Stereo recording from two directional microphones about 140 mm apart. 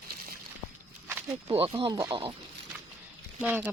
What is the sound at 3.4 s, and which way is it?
Speech, 10° right (ahead or behind).